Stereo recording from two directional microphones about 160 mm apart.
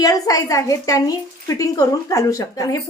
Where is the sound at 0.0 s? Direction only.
20° left (ahead or behind).